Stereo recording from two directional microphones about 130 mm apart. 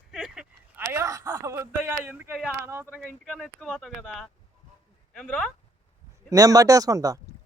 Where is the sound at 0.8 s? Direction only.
20° right (ahead or behind).